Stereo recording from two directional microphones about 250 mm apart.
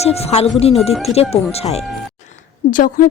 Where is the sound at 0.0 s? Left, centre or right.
Left.